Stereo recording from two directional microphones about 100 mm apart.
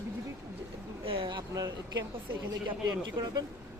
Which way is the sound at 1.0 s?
60° right (ahead or behind).